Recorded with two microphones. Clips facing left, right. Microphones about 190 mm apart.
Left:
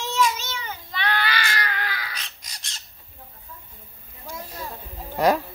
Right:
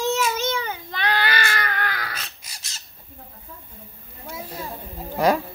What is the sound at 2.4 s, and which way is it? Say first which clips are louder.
Bird: even; 5° right (ahead or behind).